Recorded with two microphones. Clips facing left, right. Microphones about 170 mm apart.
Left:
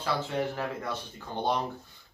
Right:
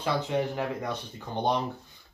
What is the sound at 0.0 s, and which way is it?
A man's voice, 15° right (ahead or behind).